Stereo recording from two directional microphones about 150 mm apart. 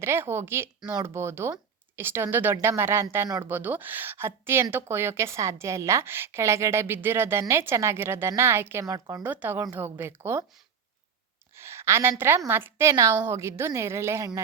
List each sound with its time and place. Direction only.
0.0 s a woman's voice: 15° right (ahead or behind)
9.2 s a woman's voice: 10° right (ahead or behind)
11.5 s a woman's voice: 15° right (ahead or behind)